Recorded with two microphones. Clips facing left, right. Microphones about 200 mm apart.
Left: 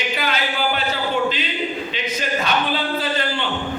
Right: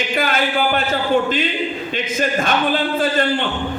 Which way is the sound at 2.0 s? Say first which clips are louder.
Right 4 dB; 50° right (ahead or behind).